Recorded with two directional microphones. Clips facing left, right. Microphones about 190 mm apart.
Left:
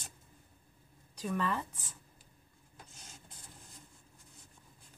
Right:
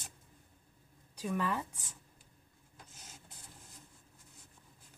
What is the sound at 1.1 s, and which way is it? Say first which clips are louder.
Speech: even; 10° right (ahead or behind).